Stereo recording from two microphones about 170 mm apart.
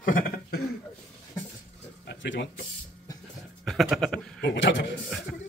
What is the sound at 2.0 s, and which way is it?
Speech, 90° left.